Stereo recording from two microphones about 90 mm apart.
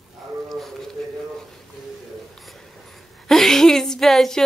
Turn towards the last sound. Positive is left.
turn(degrees=0)  # may be behind; listen again after turning